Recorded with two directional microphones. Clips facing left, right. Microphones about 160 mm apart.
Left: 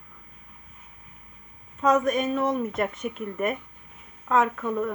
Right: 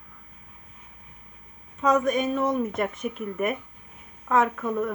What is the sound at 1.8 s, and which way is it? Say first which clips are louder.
Speech: even; centre (ahead or behind).